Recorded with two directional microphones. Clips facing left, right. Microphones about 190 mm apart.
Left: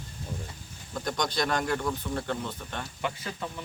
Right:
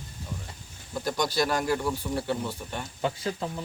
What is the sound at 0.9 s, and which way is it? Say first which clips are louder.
Speech: right 3 dB; 5° right (ahead or behind).